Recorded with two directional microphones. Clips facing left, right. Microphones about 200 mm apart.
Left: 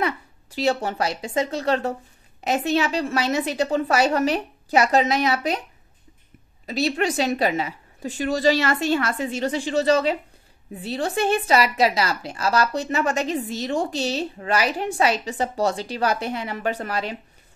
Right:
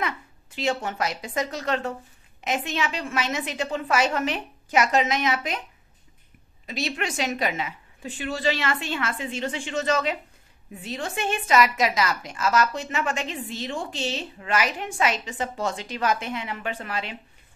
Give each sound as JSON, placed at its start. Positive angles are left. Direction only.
{"t": 0.0, "sound": "a woman's voice", "side_deg": 35}
{"t": 6.6, "sound": "a woman's voice", "side_deg": 35}